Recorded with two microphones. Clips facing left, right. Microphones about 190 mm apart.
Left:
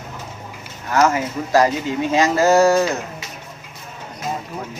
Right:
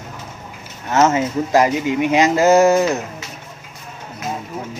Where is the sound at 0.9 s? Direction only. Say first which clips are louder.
Right 2 dB; 25° right (ahead or behind).